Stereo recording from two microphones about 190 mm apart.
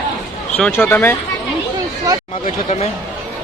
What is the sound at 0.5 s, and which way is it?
Speech, 10° left (ahead or behind).